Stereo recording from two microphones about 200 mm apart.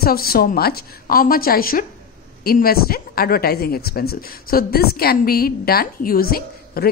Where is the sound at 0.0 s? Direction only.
50° left (ahead or behind).